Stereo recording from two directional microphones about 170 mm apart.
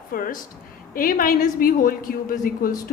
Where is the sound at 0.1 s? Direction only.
55° left (ahead or behind).